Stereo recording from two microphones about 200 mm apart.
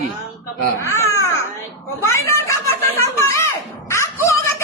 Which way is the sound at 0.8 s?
15° left (ahead or behind).